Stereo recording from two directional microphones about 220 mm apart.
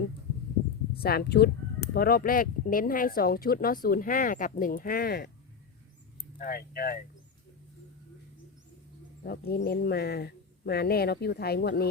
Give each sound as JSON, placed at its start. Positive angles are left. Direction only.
{"t": 1.0, "sound": "speech", "side_deg": 45}
{"t": 6.4, "sound": "speech", "side_deg": 45}
{"t": 9.2, "sound": "speech", "side_deg": 45}